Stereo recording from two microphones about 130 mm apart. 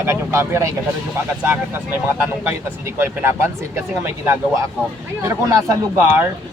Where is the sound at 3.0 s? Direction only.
20° right (ahead or behind).